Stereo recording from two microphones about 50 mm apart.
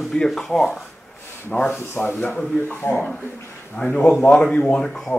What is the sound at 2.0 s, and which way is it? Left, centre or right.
Speech, left.